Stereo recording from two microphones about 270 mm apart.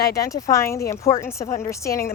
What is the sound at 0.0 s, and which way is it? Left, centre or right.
Speech, centre.